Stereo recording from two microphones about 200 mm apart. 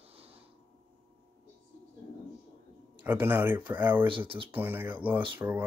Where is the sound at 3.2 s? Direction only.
10° right (ahead or behind).